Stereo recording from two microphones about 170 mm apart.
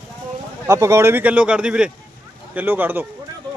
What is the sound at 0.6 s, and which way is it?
Speech, 20° right (ahead or behind).